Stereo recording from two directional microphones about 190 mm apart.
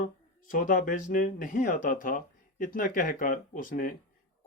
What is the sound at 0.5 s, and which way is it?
Speech, 45° left (ahead or behind).